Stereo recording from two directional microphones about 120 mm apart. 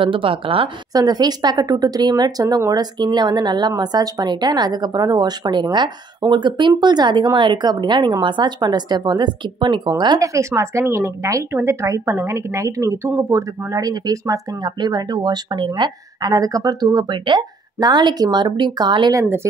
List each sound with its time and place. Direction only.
0.0 s a woman's voice: 45° right (ahead or behind)
0.9 s a woman's voice: 35° right (ahead or behind)
19.1 s speech: 20° right (ahead or behind)